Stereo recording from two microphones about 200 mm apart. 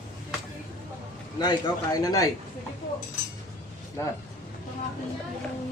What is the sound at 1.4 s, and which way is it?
Speech, 20° left (ahead or behind).